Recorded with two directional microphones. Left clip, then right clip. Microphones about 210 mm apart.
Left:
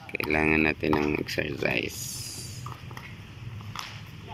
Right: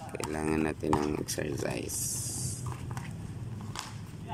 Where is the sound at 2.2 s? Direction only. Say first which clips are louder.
Left 1 dB; 25° right (ahead or behind).